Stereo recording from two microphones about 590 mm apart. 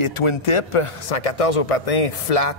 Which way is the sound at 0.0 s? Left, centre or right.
Left.